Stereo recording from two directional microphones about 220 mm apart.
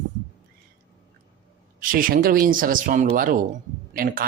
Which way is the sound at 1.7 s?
40° right (ahead or behind).